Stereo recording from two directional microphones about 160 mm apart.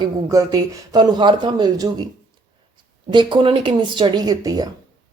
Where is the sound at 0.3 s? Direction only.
20° right (ahead or behind).